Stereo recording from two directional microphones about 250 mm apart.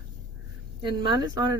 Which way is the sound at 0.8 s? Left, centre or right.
Centre.